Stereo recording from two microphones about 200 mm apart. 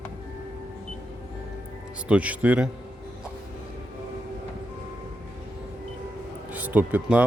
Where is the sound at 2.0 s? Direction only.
5° right (ahead or behind).